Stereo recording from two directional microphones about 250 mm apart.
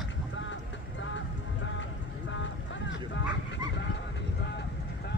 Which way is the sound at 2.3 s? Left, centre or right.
Left.